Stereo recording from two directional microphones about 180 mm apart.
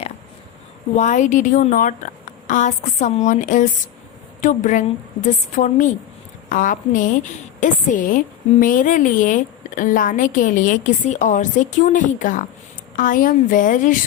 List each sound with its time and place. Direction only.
0.9 s a woman's voice: 40° left (ahead or behind)